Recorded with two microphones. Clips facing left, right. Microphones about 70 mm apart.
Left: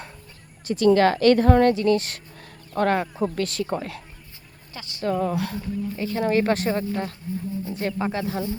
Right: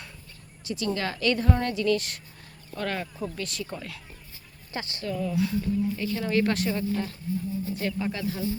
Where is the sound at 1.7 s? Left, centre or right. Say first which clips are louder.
Left 4 dB; left.